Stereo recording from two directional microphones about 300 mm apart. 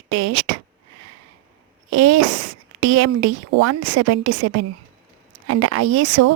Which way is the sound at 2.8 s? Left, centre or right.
Right.